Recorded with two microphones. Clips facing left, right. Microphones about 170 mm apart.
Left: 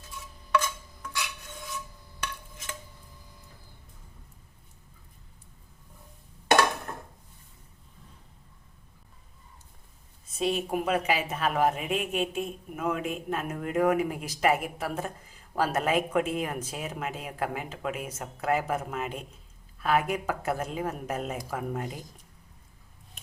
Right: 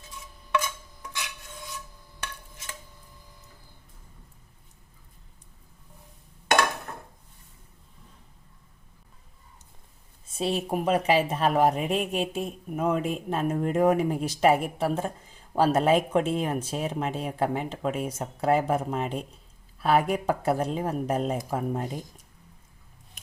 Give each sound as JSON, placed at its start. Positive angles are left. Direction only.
{"t": 10.2, "sound": "speech", "side_deg": -35}